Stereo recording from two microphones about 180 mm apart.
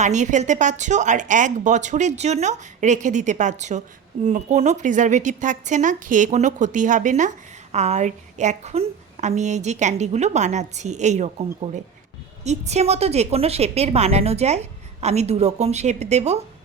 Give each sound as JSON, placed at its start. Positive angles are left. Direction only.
{"t": 0.0, "sound": "a woman's voice", "side_deg": -40}